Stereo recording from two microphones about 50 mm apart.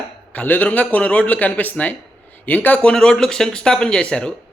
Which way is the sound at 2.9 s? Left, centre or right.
Centre.